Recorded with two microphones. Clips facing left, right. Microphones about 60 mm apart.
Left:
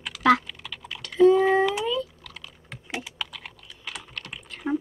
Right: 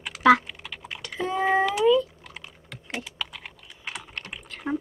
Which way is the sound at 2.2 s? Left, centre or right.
Right.